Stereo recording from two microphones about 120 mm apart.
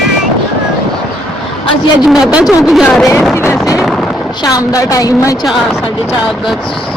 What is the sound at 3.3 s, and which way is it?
A woman's voice, 20° left (ahead or behind).